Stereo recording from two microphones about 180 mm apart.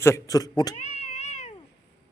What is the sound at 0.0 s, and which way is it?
Speech, 15° left (ahead or behind).